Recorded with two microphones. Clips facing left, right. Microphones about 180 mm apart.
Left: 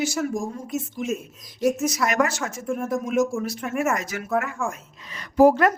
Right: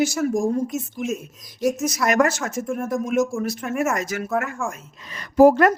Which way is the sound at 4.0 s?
45° right (ahead or behind).